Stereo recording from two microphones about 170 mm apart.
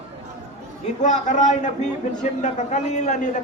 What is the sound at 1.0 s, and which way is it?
A man's voice, 45° left (ahead or behind).